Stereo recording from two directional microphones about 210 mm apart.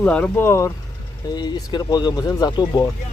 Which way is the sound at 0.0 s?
5° left (ahead or behind).